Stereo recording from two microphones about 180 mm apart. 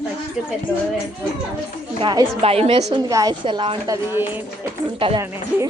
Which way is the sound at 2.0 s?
25° right (ahead or behind).